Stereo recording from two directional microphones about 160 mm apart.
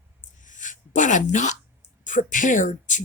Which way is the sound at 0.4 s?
50° left (ahead or behind).